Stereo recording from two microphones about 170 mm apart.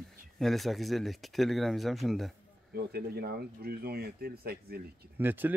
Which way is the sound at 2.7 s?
70° right (ahead or behind).